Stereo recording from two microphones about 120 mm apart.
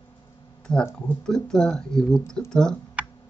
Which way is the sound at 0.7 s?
5° left (ahead or behind).